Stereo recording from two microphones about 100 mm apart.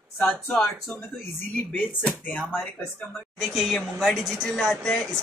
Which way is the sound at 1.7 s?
15° left (ahead or behind).